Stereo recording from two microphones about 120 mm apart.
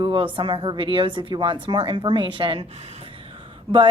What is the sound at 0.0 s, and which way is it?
Speech, 45° right (ahead or behind).